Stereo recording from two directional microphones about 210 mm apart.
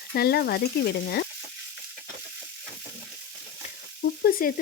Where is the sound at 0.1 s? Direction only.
50° left (ahead or behind).